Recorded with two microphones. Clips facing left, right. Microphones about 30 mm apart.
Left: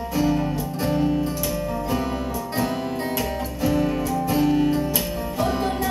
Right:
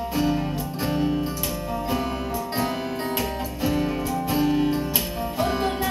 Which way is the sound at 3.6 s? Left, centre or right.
Right.